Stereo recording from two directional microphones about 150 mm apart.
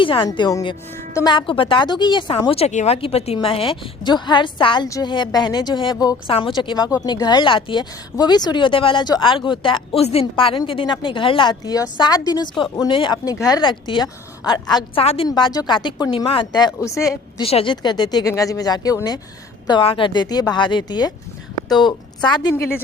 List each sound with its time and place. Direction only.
0.0 s a woman's voice: 35° left (ahead or behind)
15.0 s speech: 40° left (ahead or behind); by 17.4 s 20° left (ahead or behind)
17.4 s a woman's voice: 40° left (ahead or behind)
22.5 s a woman's voice: 15° left (ahead or behind)